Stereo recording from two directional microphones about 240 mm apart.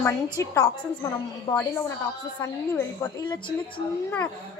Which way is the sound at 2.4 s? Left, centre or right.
Centre.